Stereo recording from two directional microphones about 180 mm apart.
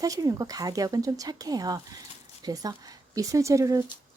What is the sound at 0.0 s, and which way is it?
Speech, 20° right (ahead or behind).